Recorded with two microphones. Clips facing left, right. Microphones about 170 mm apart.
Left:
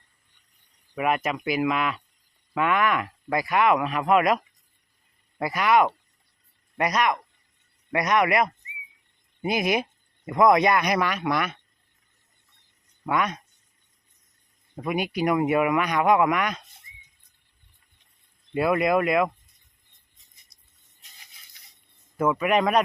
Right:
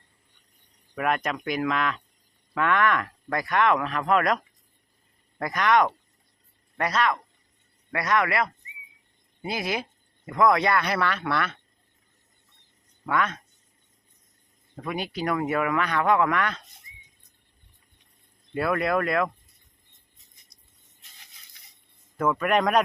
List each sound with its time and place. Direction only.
0.9 s a man's voice: 5° left (ahead or behind)
13.1 s speech: 15° left (ahead or behind)
14.8 s speech: 15° left (ahead or behind)
18.5 s speech: 15° left (ahead or behind)
22.2 s a man's voice: 5° left (ahead or behind)